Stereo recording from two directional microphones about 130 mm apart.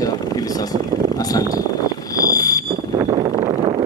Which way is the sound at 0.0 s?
30° left (ahead or behind).